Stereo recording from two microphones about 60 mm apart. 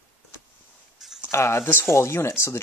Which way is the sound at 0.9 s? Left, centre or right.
Centre.